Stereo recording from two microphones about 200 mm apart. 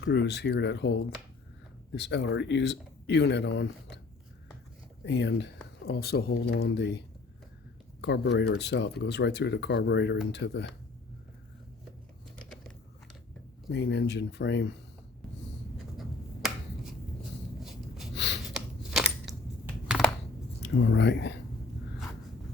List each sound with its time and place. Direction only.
0.0 s speech: 60° left (ahead or behind)
2.0 s speech: 60° left (ahead or behind)
5.0 s speech: 60° left (ahead or behind)
8.0 s speech: 60° left (ahead or behind)
12.4 s biting: 5° left (ahead or behind)
13.7 s speech: 60° left (ahead or behind)
16.0 s finger snapping: centre (ahead or behind)
17.6 s a sound: centre (ahead or behind)
18.1 s a sound: 60° left (ahead or behind)
18.5 s a sound: centre (ahead or behind)
20.6 s speech: 65° left (ahead or behind)